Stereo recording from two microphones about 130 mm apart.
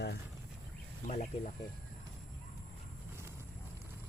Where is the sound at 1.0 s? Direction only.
60° left (ahead or behind).